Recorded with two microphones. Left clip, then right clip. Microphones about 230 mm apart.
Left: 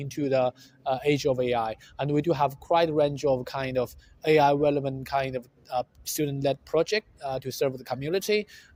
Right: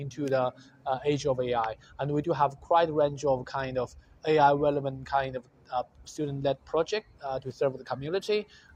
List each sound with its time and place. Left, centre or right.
0.0 s speech: left